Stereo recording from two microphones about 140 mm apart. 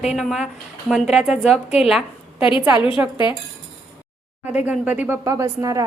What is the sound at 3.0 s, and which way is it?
Speech, 15° right (ahead or behind).